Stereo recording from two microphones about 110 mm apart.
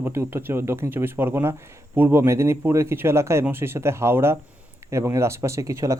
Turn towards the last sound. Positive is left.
turn(degrees=-30)  # may be behind; listen again after turning